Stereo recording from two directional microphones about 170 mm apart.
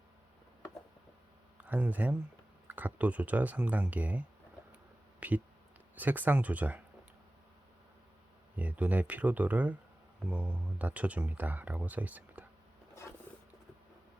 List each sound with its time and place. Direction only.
1.6 s speech: 10° right (ahead or behind)
8.5 s speech: 10° right (ahead or behind)
12.9 s zipper: 15° left (ahead or behind)